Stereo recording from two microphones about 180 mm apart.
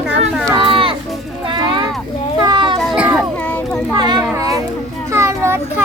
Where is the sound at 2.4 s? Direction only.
25° right (ahead or behind).